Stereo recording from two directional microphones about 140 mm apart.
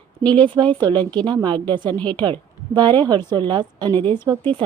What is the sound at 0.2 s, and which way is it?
Speech, 10° left (ahead or behind).